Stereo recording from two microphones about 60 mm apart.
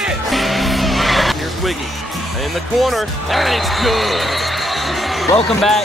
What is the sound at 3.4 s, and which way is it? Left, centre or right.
Speech, centre.